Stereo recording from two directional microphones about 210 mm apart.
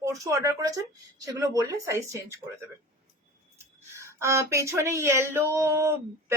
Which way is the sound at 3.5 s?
15° right (ahead or behind).